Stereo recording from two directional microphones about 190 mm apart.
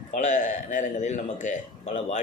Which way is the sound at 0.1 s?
45° left (ahead or behind).